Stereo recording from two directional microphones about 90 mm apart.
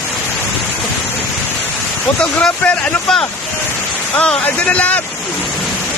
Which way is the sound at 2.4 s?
10° left (ahead or behind).